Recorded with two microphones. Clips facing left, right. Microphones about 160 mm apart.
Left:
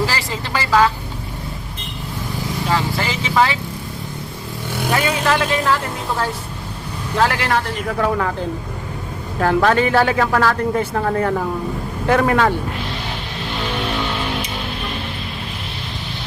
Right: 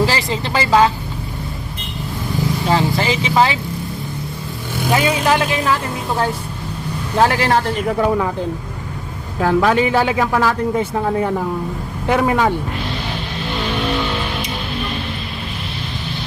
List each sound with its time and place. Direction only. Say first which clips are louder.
0.0 s vehicle: right 4 dB; 20° right (ahead or behind)
2.6 s vehicle: right 3 dB; 20° right (ahead or behind)
4.9 s speech: right 3 dB; 15° right (ahead or behind)
7.2 s speech: right 3 dB; 30° right (ahead or behind)
9.4 s speech: right 1 dB; 10° right (ahead or behind)